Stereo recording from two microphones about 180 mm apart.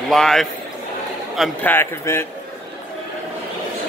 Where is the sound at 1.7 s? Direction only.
15° left (ahead or behind).